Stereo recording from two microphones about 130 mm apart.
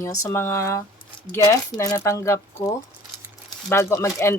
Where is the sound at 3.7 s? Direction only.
20° left (ahead or behind).